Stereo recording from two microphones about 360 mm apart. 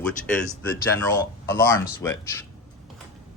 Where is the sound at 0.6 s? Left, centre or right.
Centre.